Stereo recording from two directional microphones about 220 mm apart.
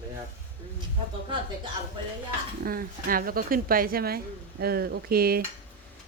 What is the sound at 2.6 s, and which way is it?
A woman's voice, 40° right (ahead or behind).